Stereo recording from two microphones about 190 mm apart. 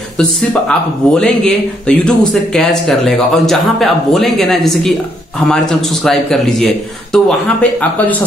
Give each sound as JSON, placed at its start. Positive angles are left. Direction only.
{"t": 0.2, "sound": "speech", "side_deg": 5}